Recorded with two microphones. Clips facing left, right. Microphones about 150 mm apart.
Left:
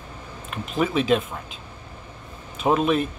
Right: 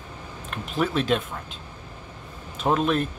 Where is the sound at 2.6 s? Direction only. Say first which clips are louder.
Left 2 dB; 5° left (ahead or behind).